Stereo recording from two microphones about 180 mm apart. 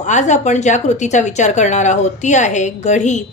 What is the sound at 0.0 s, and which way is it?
A woman's voice, 40° left (ahead or behind).